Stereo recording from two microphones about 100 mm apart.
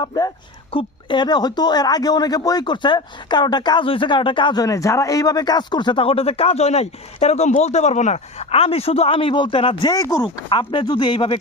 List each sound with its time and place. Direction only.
0.0 s speech: 40° left (ahead or behind)
0.7 s speech: 55° left (ahead or behind)
4.5 s a man's voice: 35° left (ahead or behind); by 9.9 s 60° left (ahead or behind)
9.9 s speech: 35° left (ahead or behind)
10.2 s speech: 55° left (ahead or behind)